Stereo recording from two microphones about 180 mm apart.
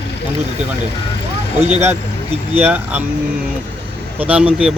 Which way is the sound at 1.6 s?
35° right (ahead or behind).